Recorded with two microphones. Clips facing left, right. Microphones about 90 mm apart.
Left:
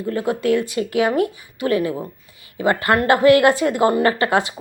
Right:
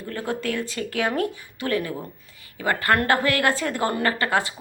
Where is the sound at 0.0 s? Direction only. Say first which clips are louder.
Left 7 dB; 15° left (ahead or behind).